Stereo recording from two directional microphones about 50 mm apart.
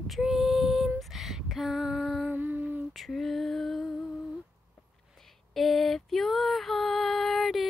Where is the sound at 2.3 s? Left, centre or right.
Right.